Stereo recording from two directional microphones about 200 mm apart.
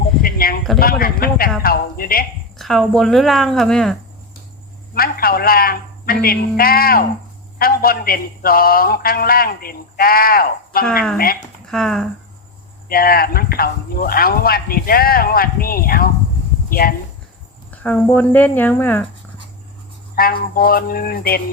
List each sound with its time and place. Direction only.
0.2 s a sound: 45° left (ahead or behind)
0.8 s a man's voice: 45° left (ahead or behind)
2.6 s speech: centre (ahead or behind)
4.9 s a man's voice: 50° left (ahead or behind)
11.6 s speech: 5° left (ahead or behind)
12.9 s a man's voice: 45° left (ahead or behind)
17.8 s speech: 10° left (ahead or behind)
20.1 s a man's voice: 45° left (ahead or behind)